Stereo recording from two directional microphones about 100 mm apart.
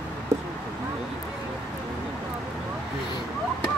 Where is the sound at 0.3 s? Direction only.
30° right (ahead or behind).